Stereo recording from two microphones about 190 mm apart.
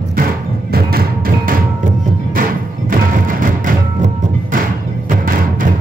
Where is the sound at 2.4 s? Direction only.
45° right (ahead or behind).